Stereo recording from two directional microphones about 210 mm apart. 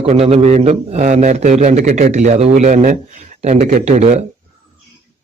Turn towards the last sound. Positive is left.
turn(degrees=-30)  # may be behind; listen again after turning